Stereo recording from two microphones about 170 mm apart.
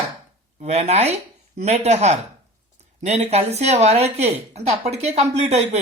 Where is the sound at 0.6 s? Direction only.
40° right (ahead or behind).